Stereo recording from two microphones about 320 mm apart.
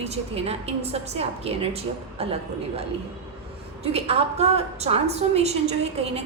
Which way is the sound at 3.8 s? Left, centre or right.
Centre.